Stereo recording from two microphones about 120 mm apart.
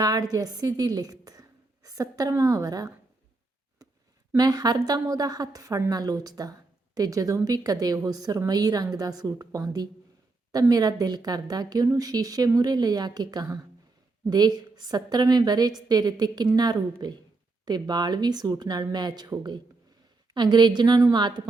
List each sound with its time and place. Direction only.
0.0 s a woman's voice: 30° right (ahead or behind)
4.4 s a woman's voice: 35° right (ahead or behind)